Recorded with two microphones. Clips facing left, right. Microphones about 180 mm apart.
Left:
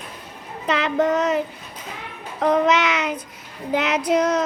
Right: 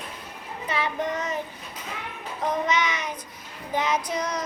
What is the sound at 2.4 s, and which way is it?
Music, 75° left (ahead or behind).